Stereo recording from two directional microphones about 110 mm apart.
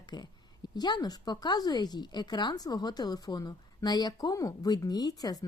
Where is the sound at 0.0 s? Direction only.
40° left (ahead or behind).